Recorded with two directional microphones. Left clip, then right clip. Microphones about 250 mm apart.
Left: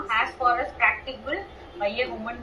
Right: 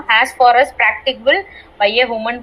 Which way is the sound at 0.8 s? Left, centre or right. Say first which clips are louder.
Right 9 dB; right.